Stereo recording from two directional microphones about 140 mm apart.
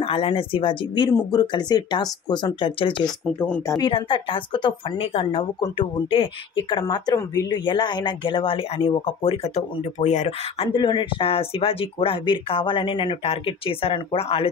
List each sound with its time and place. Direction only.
0.0 s speech: 40° left (ahead or behind)
3.3 s speech: 15° left (ahead or behind)
3.7 s speech: 35° left (ahead or behind); by 10.7 s 55° left (ahead or behind)
10.7 s speech: 35° left (ahead or behind)